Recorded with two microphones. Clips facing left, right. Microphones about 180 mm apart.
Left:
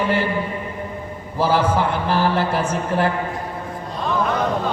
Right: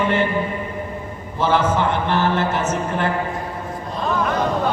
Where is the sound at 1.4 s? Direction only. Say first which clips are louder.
Even; 35° left (ahead or behind).